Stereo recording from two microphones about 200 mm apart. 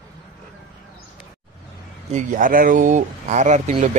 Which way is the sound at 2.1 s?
40° right (ahead or behind).